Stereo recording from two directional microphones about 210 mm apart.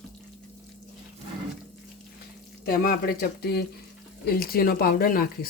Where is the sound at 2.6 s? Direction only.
45° left (ahead or behind).